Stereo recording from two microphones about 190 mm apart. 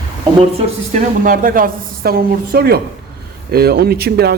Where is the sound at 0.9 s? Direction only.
45° right (ahead or behind).